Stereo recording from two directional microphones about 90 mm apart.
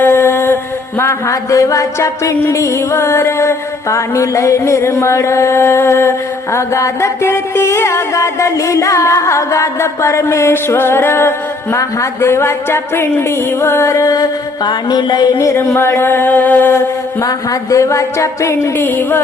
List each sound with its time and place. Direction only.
0.0 s mantra: 25° left (ahead or behind); by 15.4 s 50° left (ahead or behind)
15.4 s mantra: 35° left (ahead or behind)
18.9 s speech: 20° left (ahead or behind)